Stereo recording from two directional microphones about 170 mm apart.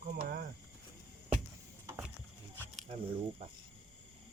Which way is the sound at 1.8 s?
15° right (ahead or behind).